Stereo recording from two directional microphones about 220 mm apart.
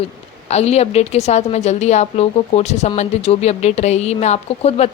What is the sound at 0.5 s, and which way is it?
A woman's voice, 30° left (ahead or behind).